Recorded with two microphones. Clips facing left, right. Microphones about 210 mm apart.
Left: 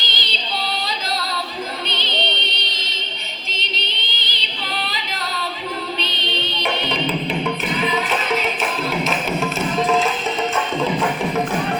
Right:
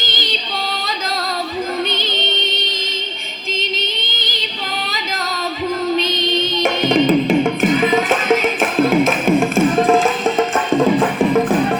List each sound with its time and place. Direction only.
0.0 s music: 45° right (ahead or behind)
1.9 s music: 45° right (ahead or behind)
6.0 s music: 45° right (ahead or behind)